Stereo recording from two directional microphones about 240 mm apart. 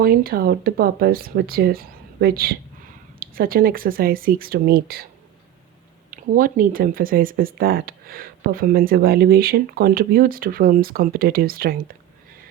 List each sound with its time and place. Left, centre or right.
0.0 s speech: right
6.1 s speech: right